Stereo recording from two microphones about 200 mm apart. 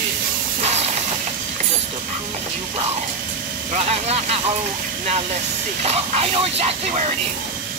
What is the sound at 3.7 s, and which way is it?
Speech, 30° right (ahead or behind).